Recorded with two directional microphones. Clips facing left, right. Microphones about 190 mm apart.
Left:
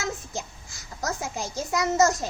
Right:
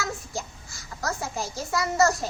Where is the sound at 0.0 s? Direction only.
20° left (ahead or behind).